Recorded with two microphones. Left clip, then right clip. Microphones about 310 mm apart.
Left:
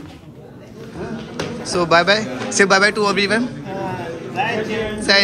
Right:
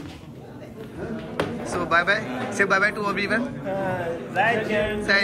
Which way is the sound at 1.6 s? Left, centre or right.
Centre.